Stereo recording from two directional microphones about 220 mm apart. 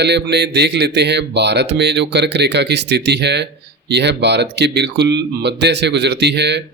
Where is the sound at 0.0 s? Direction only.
50° right (ahead or behind).